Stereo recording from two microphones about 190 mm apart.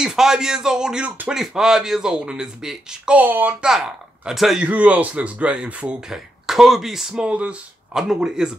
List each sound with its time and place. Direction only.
0.0 s speech: 5° right (ahead or behind)